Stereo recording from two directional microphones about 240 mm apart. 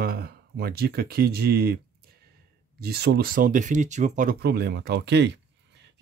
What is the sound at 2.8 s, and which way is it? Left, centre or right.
Speech, right.